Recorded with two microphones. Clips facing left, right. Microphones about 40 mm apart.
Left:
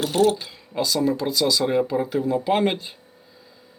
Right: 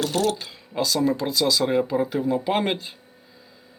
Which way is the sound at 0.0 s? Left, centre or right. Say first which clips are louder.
Left 4 dB; centre.